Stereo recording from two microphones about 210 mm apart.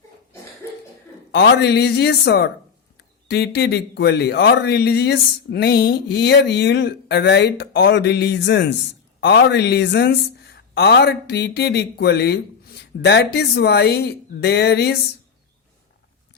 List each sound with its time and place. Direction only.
1.3 s a man's voice: 50° left (ahead or behind)